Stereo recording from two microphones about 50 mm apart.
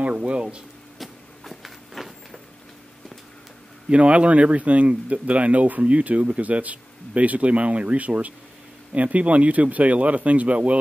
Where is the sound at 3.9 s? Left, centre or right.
Right.